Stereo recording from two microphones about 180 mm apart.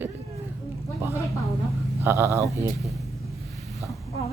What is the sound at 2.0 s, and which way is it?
Speech, 15° right (ahead or behind).